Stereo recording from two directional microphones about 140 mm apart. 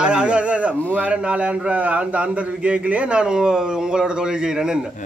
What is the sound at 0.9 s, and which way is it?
Speech, 10° right (ahead or behind).